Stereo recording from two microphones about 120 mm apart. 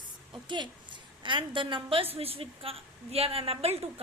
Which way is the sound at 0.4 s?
40° right (ahead or behind).